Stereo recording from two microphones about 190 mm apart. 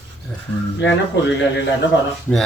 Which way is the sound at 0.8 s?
65° left (ahead or behind).